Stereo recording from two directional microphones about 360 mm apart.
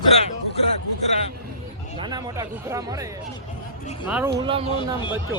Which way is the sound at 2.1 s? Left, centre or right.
Centre.